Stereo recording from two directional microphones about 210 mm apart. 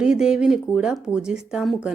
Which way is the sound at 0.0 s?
5° right (ahead or behind).